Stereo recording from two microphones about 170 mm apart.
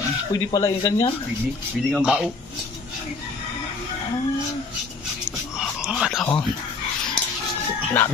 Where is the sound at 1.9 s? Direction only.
5° right (ahead or behind).